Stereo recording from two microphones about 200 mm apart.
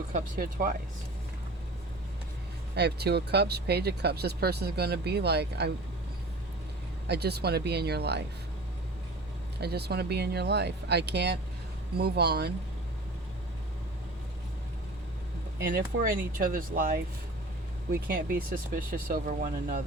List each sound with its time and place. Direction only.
0.1 s speech: 45° right (ahead or behind)
2.7 s speech: 55° right (ahead or behind)
7.1 s speech: 55° right (ahead or behind)
9.6 s speech: 55° right (ahead or behind)
15.9 s speech: 70° right (ahead or behind)
16.4 s speech: 45° right (ahead or behind)
17.9 s speech: 45° right (ahead or behind)